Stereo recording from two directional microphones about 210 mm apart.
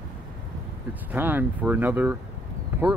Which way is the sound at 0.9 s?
10° right (ahead or behind).